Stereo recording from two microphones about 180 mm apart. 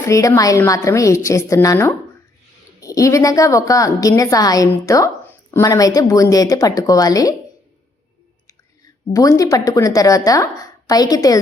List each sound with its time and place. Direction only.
0.0 s a woman's voice: 15° left (ahead or behind)
9.1 s a woman's voice: 20° left (ahead or behind)